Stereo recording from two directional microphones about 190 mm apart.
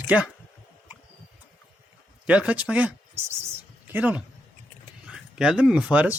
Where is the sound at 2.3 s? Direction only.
5° right (ahead or behind).